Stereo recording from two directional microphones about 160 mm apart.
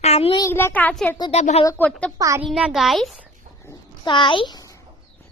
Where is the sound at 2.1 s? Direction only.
20° right (ahead or behind).